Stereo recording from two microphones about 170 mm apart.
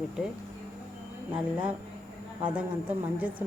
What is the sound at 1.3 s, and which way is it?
A woman's voice, 10° right (ahead or behind).